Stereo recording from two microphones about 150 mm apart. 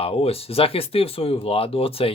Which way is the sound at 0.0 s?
40° left (ahead or behind).